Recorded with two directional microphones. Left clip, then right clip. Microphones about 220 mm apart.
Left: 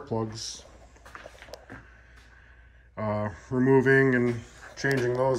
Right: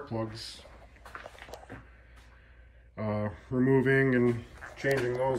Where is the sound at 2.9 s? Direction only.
5° left (ahead or behind).